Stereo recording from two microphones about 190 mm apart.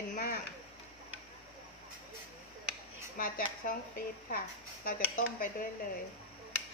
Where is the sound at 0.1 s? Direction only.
45° left (ahead or behind).